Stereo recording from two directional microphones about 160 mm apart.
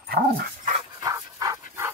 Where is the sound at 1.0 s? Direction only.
20° right (ahead or behind).